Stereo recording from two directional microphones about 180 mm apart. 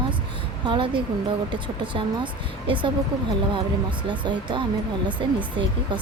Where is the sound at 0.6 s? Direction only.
25° right (ahead or behind).